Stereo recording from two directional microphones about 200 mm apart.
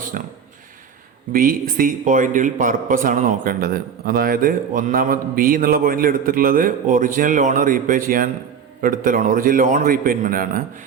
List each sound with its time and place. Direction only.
0.1 s a man's voice: 45° right (ahead or behind)